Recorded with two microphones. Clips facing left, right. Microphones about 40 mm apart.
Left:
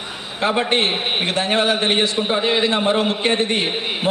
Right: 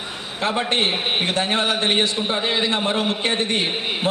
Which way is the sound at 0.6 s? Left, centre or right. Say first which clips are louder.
Left 2 dB; centre.